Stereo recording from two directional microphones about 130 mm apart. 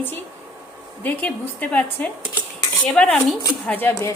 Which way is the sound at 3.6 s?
15° left (ahead or behind).